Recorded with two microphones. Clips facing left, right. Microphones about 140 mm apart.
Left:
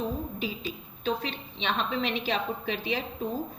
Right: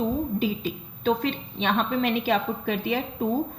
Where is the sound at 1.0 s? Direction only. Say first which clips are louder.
Right 6 dB; 50° right (ahead or behind).